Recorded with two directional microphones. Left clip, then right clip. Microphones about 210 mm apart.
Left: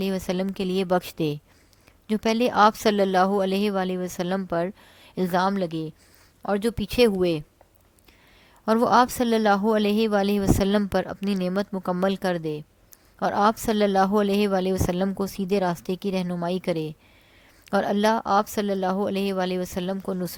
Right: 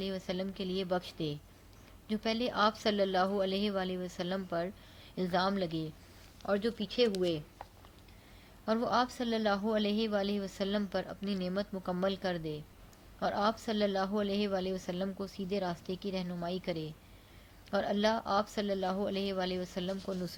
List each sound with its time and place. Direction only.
0.0 s a woman's voice: 50° left (ahead or behind)
8.6 s a woman's voice: 50° left (ahead or behind)